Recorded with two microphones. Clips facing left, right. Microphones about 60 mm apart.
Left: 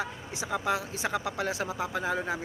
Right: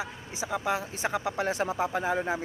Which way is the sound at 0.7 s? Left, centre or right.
Right.